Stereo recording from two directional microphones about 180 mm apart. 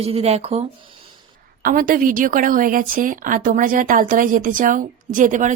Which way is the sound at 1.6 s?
50° right (ahead or behind).